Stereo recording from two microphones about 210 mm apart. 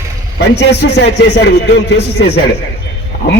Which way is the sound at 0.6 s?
55° left (ahead or behind).